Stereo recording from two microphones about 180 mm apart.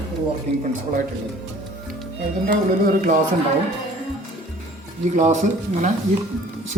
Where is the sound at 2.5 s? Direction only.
50° right (ahead or behind).